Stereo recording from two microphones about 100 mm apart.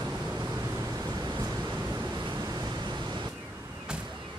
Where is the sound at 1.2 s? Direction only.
40° right (ahead or behind).